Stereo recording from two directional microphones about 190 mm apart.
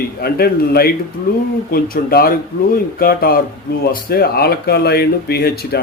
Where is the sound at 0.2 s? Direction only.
55° left (ahead or behind).